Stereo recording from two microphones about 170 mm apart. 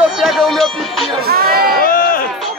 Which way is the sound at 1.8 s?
55° left (ahead or behind).